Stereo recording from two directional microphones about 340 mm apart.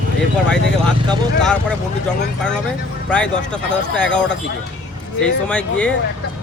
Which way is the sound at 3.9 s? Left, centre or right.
Centre.